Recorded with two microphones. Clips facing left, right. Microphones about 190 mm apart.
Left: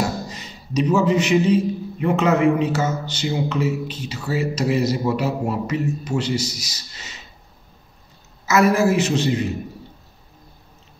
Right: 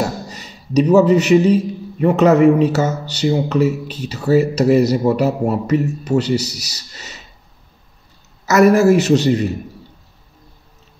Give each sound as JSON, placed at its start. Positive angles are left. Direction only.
{"t": 0.7, "sound": "a man's voice", "side_deg": -40}
{"t": 6.3, "sound": "a man's voice", "side_deg": -70}
{"t": 6.9, "sound": "a sound", "side_deg": -40}
{"t": 8.5, "sound": "a man's voice", "side_deg": -45}